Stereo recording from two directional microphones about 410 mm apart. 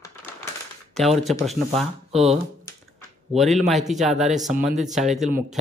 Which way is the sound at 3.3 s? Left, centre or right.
Centre.